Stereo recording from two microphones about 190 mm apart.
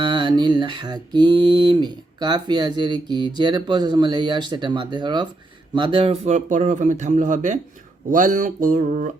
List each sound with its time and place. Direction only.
0.0 s mantra: 25° right (ahead or behind)
5.7 s speech: 25° right (ahead or behind); by 7.6 s 40° right (ahead or behind)
8.1 s a sound: 45° right (ahead or behind)